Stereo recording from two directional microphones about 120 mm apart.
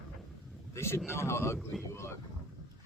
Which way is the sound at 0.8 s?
20° left (ahead or behind).